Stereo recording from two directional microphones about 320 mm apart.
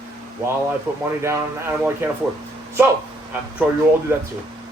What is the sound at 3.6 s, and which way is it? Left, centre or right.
Speech, centre.